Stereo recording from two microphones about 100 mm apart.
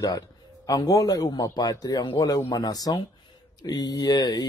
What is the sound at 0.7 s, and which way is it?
Speech, 40° left (ahead or behind).